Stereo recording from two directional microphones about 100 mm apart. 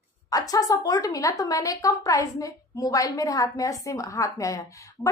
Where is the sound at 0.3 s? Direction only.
40° left (ahead or behind).